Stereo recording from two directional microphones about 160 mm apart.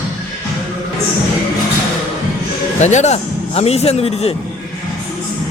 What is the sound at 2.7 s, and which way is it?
A man's voice, 45° left (ahead or behind).